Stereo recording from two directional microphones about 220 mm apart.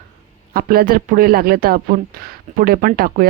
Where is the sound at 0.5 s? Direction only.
40° right (ahead or behind).